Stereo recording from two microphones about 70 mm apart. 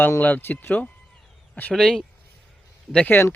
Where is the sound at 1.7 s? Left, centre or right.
Centre.